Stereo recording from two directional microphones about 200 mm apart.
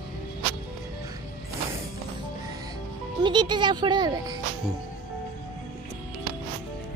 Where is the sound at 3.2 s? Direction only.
20° right (ahead or behind).